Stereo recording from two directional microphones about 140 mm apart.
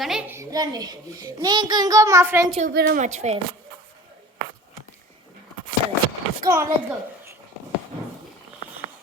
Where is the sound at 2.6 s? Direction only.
70° right (ahead or behind); by 3.3 s 55° right (ahead or behind).